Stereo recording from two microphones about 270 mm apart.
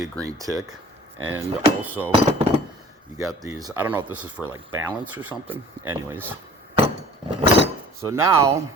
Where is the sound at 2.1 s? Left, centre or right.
Right.